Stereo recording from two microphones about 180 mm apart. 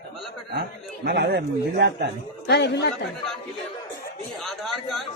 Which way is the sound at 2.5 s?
70° left (ahead or behind).